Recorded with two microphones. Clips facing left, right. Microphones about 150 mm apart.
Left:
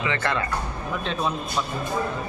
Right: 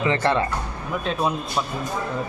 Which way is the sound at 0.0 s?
35° right (ahead or behind).